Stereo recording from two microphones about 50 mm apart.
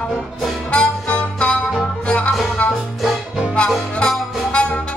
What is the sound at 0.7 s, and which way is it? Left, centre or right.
Music, left.